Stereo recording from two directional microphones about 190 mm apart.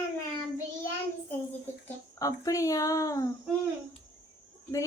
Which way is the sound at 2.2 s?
15° left (ahead or behind).